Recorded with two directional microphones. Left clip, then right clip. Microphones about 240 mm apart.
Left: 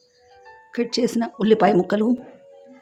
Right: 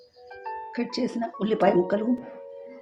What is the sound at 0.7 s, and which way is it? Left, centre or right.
Speech, left.